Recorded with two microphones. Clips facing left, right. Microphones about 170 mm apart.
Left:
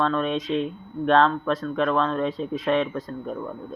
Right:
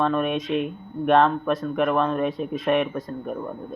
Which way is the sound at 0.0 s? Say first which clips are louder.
Right 1 dB; 15° right (ahead or behind).